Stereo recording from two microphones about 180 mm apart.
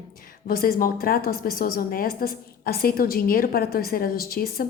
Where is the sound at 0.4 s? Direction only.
55° left (ahead or behind).